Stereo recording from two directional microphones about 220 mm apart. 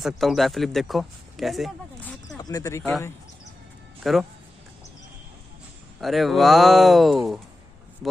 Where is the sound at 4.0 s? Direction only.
Centre (ahead or behind).